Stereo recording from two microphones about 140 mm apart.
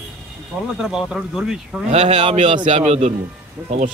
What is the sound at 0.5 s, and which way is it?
Speech, 5° right (ahead or behind).